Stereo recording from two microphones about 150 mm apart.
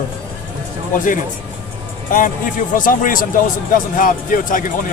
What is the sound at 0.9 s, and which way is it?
Speech, 60° left (ahead or behind).